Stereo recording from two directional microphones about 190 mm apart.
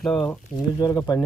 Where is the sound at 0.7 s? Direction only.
20° left (ahead or behind).